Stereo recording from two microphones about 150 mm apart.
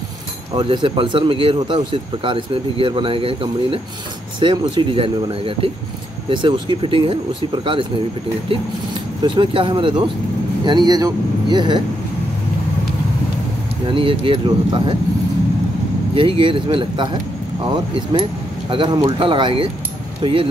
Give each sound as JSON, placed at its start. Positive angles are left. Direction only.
{"t": 0.6, "sound": "speech", "side_deg": -35}
{"t": 9.2, "sound": "speech", "side_deg": -35}
{"t": 13.8, "sound": "speech", "side_deg": -35}
{"t": 16.2, "sound": "speech", "side_deg": -35}